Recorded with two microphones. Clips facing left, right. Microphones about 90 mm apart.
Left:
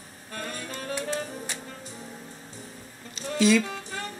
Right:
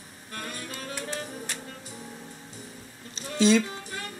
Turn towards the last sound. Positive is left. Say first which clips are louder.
# even
turn(degrees=-30)  # may be behind; listen again after turning